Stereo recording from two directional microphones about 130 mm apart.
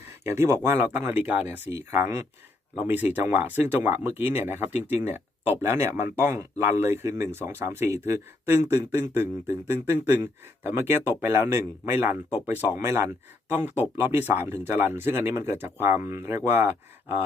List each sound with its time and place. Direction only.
0.3 s speech: 20° right (ahead or behind)